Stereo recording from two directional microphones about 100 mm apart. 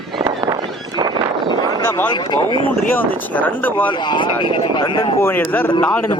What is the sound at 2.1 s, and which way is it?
Speech, 50° left (ahead or behind).